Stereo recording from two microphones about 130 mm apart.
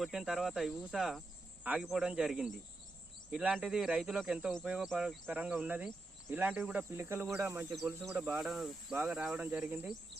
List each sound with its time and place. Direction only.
0.0 s speech: centre (ahead or behind); by 7.7 s 20° right (ahead or behind)
7.7 s speech: centre (ahead or behind)